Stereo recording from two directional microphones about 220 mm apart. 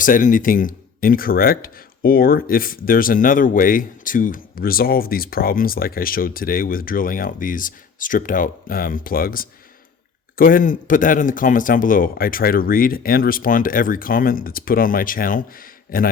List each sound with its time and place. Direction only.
0.0 s speech: 35° left (ahead or behind)